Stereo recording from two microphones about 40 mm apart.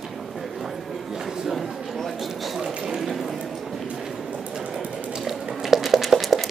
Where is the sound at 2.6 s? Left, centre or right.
Centre.